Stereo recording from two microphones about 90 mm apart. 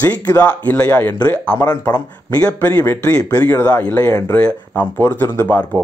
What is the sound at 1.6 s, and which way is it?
Speech, 45° left (ahead or behind).